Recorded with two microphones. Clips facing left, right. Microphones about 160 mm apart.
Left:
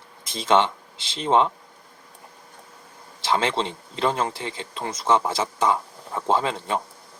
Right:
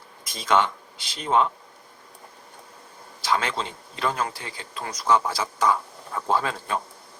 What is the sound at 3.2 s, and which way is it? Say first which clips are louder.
Speech: left 3 dB; 25° left (ahead or behind).